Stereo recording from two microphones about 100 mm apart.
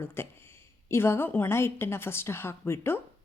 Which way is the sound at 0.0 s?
25° left (ahead or behind).